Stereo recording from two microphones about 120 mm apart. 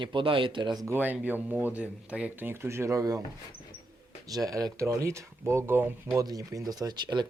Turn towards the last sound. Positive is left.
turn(degrees=-40)  # may be behind; listen again after turning